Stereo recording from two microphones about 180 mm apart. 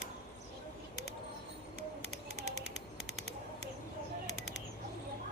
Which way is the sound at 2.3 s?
80° left.